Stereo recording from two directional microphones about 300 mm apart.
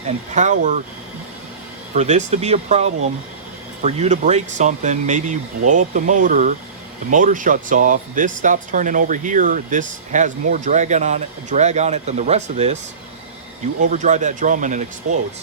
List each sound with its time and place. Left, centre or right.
0.3 s speech: right
1.9 s speech: right
13.9 s speech: right